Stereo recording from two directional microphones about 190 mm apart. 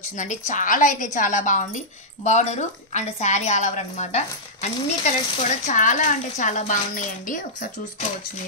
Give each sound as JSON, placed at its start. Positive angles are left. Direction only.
{"t": 0.5, "sound": "speech", "side_deg": 45}